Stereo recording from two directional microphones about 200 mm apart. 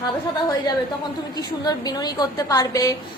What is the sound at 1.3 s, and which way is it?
A woman's voice, 20° left (ahead or behind).